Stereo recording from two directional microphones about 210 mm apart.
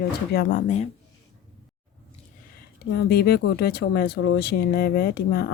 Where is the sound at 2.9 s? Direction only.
50° left (ahead or behind).